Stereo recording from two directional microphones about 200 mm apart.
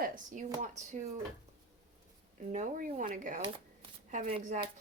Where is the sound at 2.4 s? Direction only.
35° right (ahead or behind).